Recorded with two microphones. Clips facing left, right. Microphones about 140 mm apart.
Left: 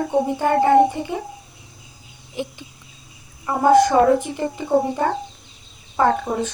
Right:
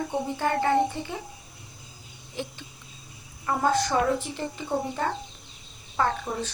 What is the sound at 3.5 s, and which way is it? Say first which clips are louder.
Speech: left 10 dB; 55° left (ahead or behind).